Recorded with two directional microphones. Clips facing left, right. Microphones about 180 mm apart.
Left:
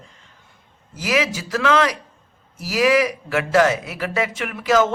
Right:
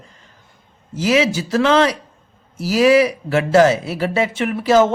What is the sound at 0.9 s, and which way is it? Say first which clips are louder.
Speech: right 5 dB; 25° right (ahead or behind).